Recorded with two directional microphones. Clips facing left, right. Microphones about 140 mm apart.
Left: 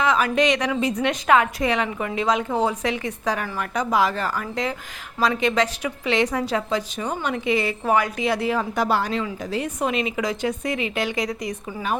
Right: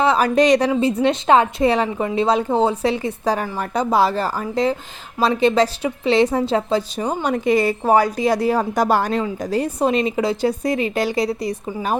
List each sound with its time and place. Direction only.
0.0 s a woman's voice: 35° right (ahead or behind)